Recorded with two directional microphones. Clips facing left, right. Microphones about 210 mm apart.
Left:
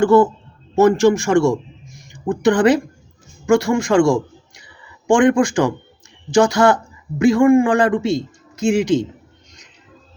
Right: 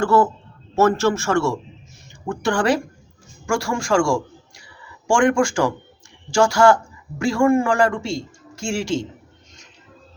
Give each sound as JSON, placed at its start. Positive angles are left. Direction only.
{"t": 0.0, "sound": "a man's voice", "side_deg": 15}